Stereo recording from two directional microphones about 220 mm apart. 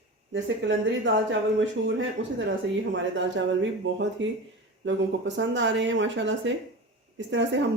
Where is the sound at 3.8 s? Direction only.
55° right (ahead or behind).